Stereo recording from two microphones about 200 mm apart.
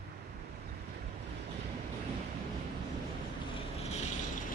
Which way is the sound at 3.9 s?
35° left (ahead or behind).